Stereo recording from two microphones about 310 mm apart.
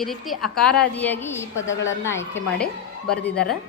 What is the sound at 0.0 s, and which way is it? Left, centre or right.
A woman's voice, centre.